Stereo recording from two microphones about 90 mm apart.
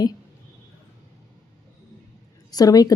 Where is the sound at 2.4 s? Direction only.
45° left (ahead or behind).